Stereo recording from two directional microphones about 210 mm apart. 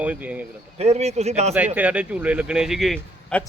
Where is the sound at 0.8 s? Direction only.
30° right (ahead or behind).